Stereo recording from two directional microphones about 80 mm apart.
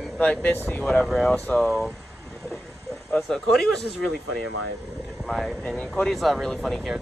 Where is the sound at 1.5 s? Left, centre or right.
Centre.